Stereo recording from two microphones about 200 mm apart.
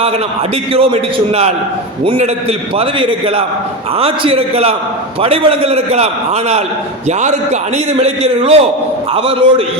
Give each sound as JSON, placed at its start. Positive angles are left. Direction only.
{"t": 0.7, "sound": "a man's voice", "side_deg": -30}